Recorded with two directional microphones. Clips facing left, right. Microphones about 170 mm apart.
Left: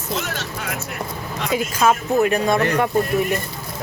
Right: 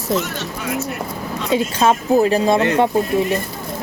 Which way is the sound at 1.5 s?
30° right (ahead or behind).